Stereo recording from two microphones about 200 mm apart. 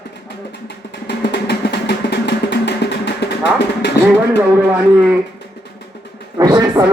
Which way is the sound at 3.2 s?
60° left (ahead or behind).